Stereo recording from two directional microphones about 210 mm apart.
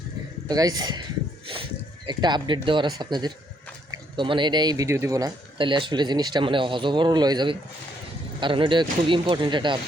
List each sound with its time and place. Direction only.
0.4 s speech: 15° right (ahead or behind)
2.0 s speech: 20° right (ahead or behind)